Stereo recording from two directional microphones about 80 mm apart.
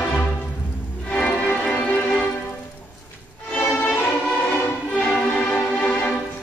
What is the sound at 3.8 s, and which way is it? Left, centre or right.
Music, left.